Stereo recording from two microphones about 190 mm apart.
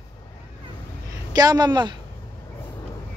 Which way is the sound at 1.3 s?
20° right (ahead or behind).